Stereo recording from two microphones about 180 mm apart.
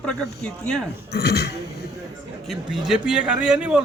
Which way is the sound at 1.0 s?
65° left (ahead or behind).